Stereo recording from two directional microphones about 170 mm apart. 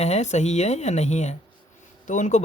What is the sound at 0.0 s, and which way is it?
Speech, 40° left (ahead or behind).